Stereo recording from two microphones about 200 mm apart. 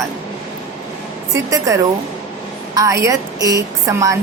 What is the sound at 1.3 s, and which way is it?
A woman's voice, 15° right (ahead or behind).